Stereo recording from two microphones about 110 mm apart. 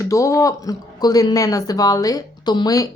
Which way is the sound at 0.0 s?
30° left (ahead or behind).